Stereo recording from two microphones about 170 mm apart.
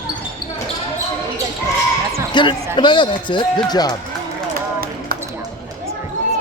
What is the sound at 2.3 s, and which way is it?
Speech, 30° left (ahead or behind).